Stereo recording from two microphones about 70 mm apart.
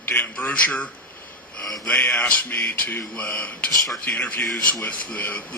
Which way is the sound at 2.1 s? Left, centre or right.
Left.